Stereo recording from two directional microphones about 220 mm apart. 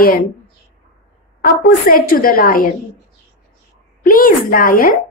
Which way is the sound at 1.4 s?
40° left (ahead or behind).